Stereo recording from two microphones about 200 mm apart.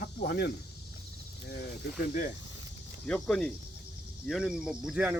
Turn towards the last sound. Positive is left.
turn(degrees=-5)  # may be behind; listen again after turning